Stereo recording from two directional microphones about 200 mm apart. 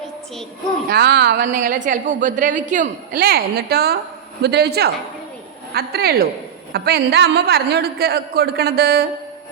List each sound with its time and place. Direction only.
0.9 s a woman's voice: 50° right (ahead or behind)